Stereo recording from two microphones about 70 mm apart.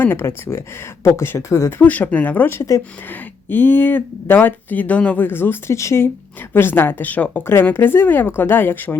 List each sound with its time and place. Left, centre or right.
0.0 s speech: left
1.8 s speech: left
2.6 s speech: left
3.1 s speech: left
5.7 s speech: left
6.5 s speech: left